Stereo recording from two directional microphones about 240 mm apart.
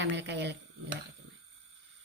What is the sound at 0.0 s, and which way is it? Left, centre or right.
Speech, right.